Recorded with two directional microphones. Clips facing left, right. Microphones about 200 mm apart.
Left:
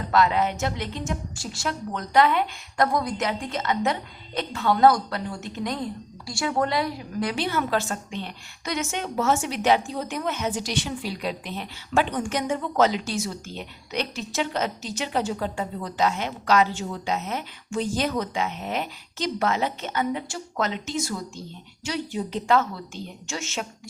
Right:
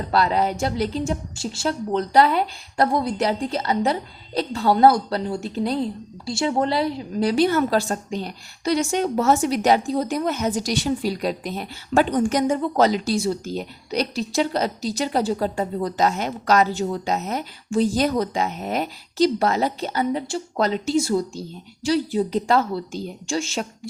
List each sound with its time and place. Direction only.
0.1 s a woman's voice: 35° right (ahead or behind)
7.3 s a woman's voice: 40° right (ahead or behind)